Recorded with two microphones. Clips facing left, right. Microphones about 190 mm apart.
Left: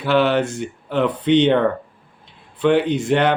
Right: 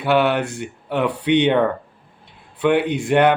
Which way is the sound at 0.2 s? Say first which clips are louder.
Left 2 dB; 10° right (ahead or behind).